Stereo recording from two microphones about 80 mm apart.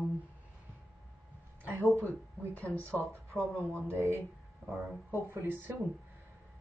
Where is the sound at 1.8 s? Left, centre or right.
Left.